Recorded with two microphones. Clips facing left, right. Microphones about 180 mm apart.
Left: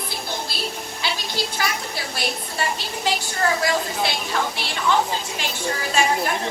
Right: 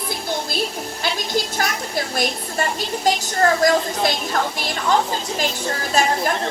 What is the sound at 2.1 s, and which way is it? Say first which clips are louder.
A woman's voice: right 3 dB; 45° right (ahead or behind).